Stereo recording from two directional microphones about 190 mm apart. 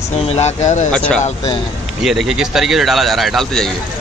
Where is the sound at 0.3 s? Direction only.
35° left (ahead or behind).